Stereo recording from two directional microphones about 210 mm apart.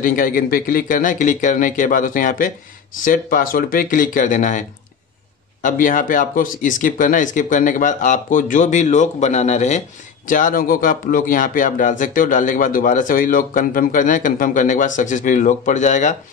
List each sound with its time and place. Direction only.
0.0 s speech: 40° left (ahead or behind)